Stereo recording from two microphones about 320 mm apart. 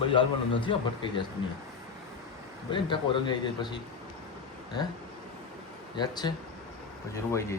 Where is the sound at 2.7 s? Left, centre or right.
Centre.